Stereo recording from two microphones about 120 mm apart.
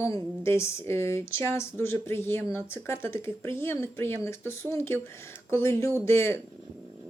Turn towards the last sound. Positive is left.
turn(degrees=20)  # may be behind; listen again after turning